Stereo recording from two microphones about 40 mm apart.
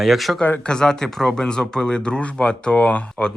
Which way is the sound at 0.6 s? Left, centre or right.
Centre.